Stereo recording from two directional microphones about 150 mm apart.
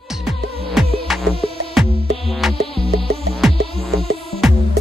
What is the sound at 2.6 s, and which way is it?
Music, 40° left (ahead or behind).